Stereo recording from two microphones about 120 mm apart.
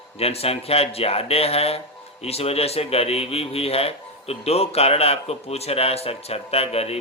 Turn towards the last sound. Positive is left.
turn(degrees=55)  # may be behind; listen again after turning